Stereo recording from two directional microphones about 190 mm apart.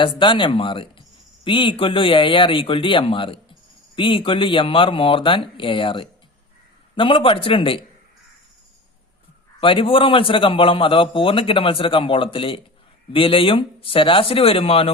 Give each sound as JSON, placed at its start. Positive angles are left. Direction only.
{"t": 0.0, "sound": "a man's voice", "side_deg": 25}
{"t": 9.6, "sound": "a man's voice", "side_deg": 25}